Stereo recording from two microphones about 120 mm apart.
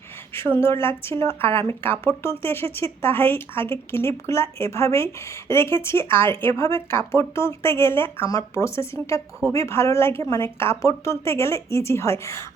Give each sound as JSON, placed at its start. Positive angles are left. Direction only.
{"t": 0.3, "sound": "speech", "side_deg": 20}